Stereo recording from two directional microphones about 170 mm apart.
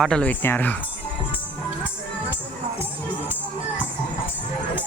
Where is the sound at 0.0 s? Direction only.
5° left (ahead or behind).